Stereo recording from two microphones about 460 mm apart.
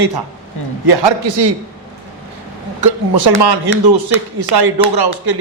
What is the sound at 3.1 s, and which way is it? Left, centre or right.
A man's voice, right.